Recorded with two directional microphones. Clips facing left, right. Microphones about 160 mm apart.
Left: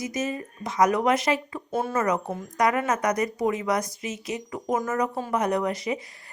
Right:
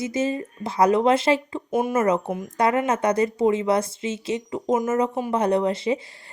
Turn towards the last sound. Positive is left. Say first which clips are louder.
# right 5 dB
turn(degrees=-30)  # may be behind; listen again after turning